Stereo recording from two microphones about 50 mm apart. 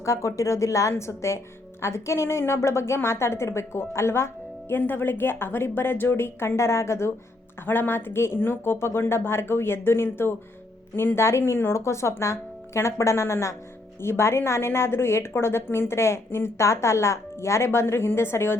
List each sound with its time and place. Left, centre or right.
0.0 s a woman's voice: left
4.7 s speech: left
7.6 s a woman's voice: left